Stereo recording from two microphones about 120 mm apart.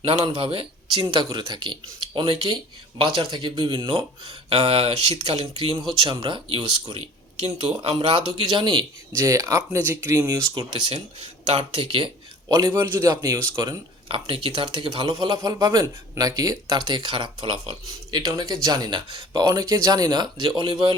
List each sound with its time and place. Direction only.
0.0 s speech: 55° right (ahead or behind)
5.4 s speech: 40° right (ahead or behind)
6.9 s a sound: 60° right (ahead or behind)
7.8 s speech: 50° right (ahead or behind)
9.1 s speech: 25° right (ahead or behind); by 12.1 s 45° right (ahead or behind)
12.5 s speech: 25° right (ahead or behind)
14.1 s speech: 45° right (ahead or behind)
15.0 s speech: 35° right (ahead or behind)
18.3 s speech: 30° right (ahead or behind)